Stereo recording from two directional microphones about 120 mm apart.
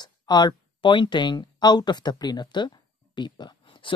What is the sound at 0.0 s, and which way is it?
Speech, 35° left (ahead or behind).